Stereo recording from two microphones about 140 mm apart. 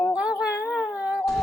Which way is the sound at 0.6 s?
5° left (ahead or behind).